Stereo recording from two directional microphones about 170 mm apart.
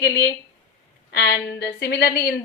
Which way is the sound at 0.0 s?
75° left (ahead or behind).